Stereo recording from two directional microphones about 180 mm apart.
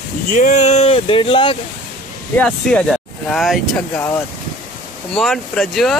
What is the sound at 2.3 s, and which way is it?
Speech, 5° left (ahead or behind).